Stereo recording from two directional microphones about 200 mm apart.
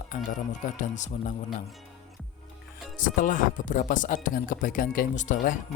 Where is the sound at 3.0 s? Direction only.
40° left (ahead or behind).